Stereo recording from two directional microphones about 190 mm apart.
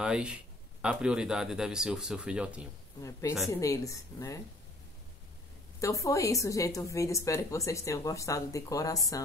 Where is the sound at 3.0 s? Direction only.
15° left (ahead or behind).